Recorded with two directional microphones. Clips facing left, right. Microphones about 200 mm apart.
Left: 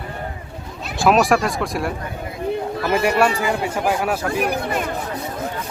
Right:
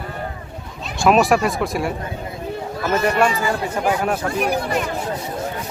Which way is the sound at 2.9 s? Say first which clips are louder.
Even; 10° left (ahead or behind).